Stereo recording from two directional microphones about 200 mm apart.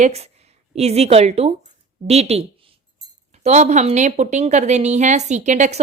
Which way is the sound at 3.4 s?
35° right (ahead or behind).